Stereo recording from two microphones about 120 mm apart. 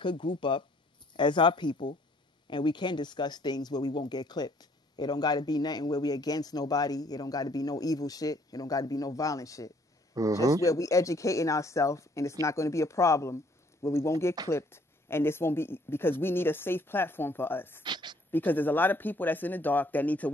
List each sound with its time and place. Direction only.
0.0 s speech: 40° left (ahead or behind)
10.1 s speech: 30° right (ahead or behind)
10.6 s speech: 25° left (ahead or behind)
17.8 s a sound: 40° right (ahead or behind)
18.3 s speech: 15° left (ahead or behind)